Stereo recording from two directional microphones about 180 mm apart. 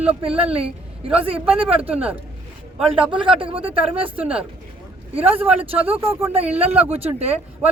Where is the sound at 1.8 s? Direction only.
5° right (ahead or behind).